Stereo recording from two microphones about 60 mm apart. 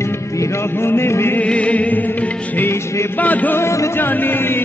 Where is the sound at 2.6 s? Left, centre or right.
Left.